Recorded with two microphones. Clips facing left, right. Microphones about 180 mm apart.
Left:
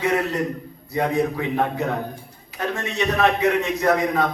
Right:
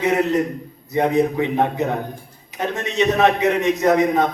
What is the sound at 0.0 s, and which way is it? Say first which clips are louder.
A man's voice: right 4 dB; 20° right (ahead or behind).